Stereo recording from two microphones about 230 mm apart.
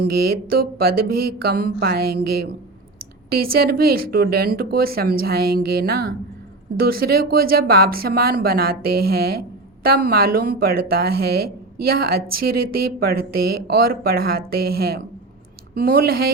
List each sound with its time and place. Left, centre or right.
0.1 s speech: right